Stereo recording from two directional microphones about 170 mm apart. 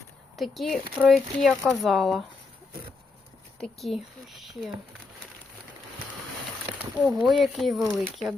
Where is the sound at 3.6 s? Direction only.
Centre (ahead or behind).